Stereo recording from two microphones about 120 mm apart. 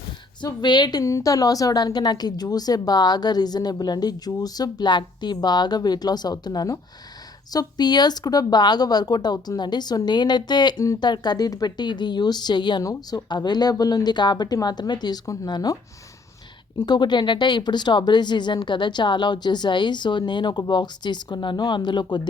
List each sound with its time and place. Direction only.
0.4 s speech: 35° left (ahead or behind)
16.8 s speech: 35° left (ahead or behind)